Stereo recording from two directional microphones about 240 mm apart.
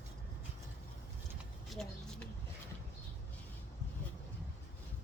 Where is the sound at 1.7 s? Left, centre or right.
Centre.